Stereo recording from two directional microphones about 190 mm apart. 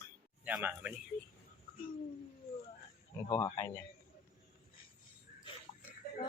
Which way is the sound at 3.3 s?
15° left (ahead or behind).